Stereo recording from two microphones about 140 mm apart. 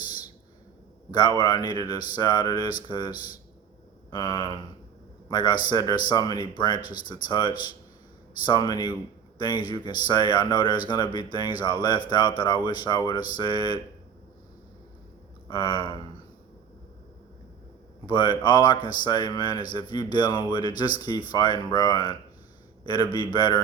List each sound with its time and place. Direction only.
1.4 s speech: 30° left (ahead or behind)
15.4 s speech: 35° left (ahead or behind)
18.0 s speech: 30° left (ahead or behind)